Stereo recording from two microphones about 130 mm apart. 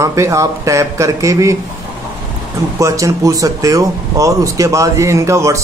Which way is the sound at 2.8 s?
25° right (ahead or behind).